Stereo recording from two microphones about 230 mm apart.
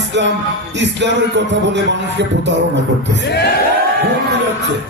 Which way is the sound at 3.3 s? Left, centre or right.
Left.